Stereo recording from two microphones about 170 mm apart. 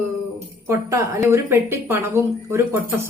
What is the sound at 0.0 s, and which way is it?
Speech, 15° right (ahead or behind).